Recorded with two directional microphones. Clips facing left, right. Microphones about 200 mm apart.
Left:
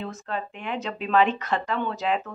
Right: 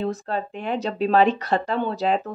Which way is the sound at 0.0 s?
35° right (ahead or behind).